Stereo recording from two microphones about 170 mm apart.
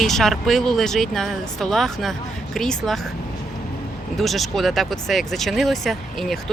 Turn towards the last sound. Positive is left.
turn(degrees=0)  # may be behind; listen again after turning